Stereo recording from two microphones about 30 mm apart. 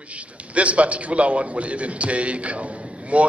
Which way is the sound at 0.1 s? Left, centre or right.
Right.